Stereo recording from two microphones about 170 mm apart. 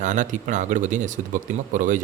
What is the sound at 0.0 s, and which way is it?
Speech, 45° right (ahead or behind).